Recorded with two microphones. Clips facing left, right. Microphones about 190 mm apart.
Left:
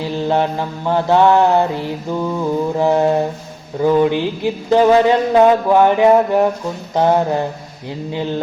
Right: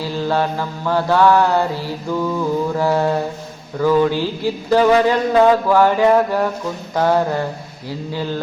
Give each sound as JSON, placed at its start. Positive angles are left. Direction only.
{"t": 0.0, "sound": "speech", "side_deg": 20}